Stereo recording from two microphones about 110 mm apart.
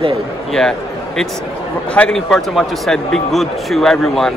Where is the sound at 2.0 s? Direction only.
5° left (ahead or behind).